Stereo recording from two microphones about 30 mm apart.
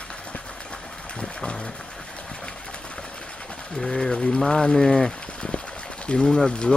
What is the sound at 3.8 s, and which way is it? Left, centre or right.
Speech, centre.